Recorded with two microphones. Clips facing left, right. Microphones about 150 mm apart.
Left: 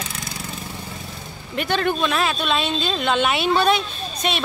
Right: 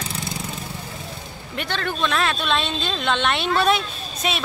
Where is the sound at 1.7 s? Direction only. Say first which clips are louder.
Left 4 dB; 15° left (ahead or behind).